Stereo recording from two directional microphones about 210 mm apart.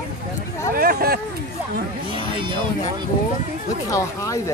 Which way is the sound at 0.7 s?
45° right (ahead or behind).